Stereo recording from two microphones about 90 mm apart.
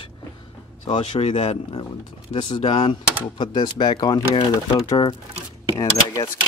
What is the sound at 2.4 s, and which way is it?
Speech, 75° left (ahead or behind).